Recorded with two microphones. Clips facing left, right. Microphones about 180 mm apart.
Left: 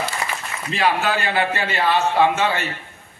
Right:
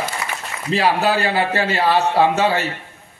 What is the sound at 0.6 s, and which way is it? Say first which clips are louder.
A man's voice: right 3 dB; 35° right (ahead or behind).